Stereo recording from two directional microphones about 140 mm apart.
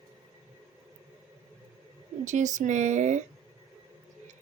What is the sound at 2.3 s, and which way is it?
Speech, 60° right (ahead or behind).